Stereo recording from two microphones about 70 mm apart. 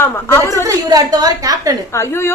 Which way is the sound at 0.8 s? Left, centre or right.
Right.